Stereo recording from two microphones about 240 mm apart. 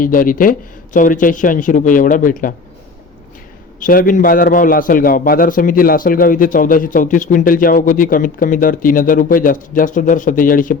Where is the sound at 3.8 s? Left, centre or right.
Left.